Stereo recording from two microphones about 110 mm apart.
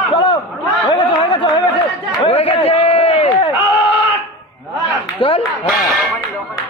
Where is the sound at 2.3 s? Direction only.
65° left (ahead or behind).